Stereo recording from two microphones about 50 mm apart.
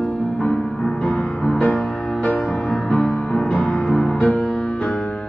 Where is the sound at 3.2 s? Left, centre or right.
Left.